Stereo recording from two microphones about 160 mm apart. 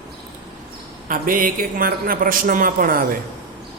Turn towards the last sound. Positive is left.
turn(degrees=-65)  # may be behind; listen again after turning